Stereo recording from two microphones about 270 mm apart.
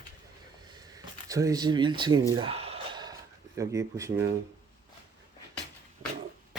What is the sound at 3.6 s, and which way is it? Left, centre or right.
Speech, centre.